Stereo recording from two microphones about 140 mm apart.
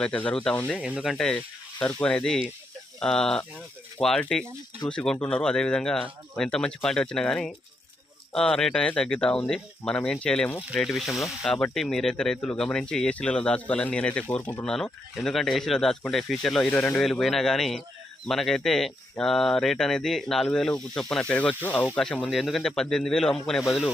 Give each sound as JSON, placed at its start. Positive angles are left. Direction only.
{"t": 0.0, "sound": "speech", "side_deg": 10}
{"t": 0.7, "sound": "speech", "side_deg": -5}
{"t": 16.7, "sound": "speech", "side_deg": 20}
{"t": 17.0, "sound": "speech", "side_deg": 0}